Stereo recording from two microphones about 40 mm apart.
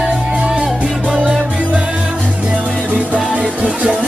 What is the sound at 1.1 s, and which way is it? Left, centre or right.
Music, right.